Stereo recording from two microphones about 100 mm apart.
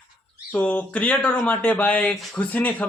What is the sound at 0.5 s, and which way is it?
Speech, 15° left (ahead or behind).